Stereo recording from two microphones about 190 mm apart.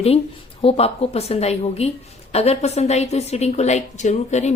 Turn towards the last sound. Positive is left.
turn(degrees=35)  # may be behind; listen again after turning